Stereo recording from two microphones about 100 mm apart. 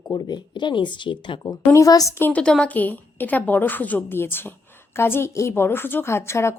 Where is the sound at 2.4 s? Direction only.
10° left (ahead or behind).